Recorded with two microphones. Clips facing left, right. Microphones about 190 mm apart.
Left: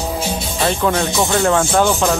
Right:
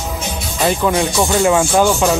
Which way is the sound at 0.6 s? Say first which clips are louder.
Right 2 dB; 10° right (ahead or behind).